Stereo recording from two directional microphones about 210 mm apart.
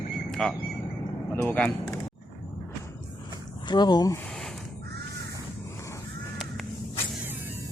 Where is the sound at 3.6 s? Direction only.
20° left (ahead or behind).